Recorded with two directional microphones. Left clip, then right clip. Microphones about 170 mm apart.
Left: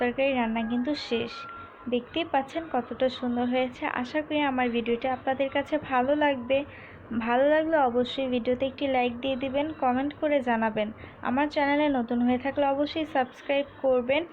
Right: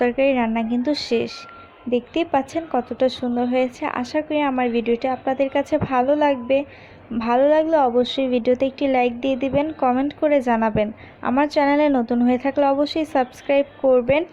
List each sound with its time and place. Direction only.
0.0 s a woman's voice: 65° right (ahead or behind)